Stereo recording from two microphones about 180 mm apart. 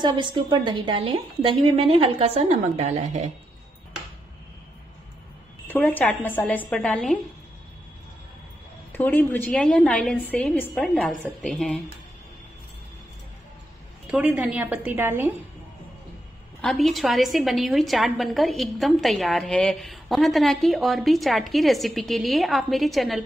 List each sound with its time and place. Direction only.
0.0 s a woman's voice: 25° right (ahead or behind); by 3.3 s 40° right (ahead or behind)
5.7 s a woman's voice: 10° left (ahead or behind)
8.9 s a woman's voice: 10° left (ahead or behind)
14.0 s a woman's voice: 5° right (ahead or behind)
16.6 s a woman's voice: centre (ahead or behind)